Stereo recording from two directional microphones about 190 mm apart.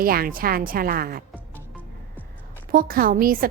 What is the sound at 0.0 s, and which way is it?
A woman's voice, 50° right (ahead or behind).